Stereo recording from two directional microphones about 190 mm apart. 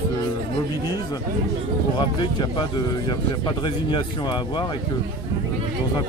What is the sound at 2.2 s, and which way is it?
Speech, 25° left (ahead or behind).